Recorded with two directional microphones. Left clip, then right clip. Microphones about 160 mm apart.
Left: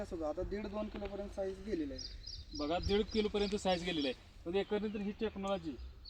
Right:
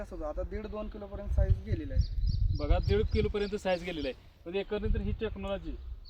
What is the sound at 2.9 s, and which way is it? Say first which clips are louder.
Speech: right 5 dB; 25° right (ahead or behind).